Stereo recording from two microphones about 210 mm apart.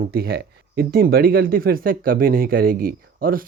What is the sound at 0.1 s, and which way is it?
Speech, 45° right (ahead or behind).